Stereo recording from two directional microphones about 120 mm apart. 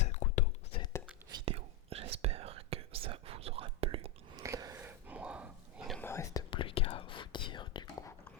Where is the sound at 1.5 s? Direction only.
55° right (ahead or behind).